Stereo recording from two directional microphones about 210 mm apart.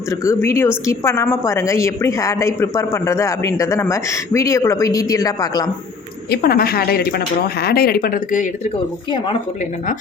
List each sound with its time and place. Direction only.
0.1 s a woman's voice: 15° left (ahead or behind)
6.3 s a woman's voice: 45° left (ahead or behind)